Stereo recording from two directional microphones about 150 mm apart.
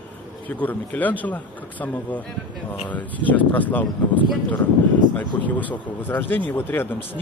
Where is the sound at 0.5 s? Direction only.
10° left (ahead or behind).